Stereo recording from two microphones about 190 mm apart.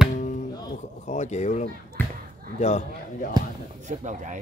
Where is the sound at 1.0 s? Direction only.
40° left (ahead or behind).